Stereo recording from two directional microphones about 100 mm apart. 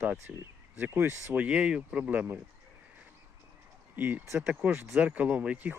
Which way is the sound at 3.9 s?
15° right (ahead or behind).